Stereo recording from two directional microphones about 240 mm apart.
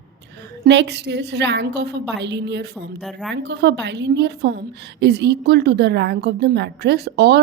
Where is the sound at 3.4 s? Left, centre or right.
Right.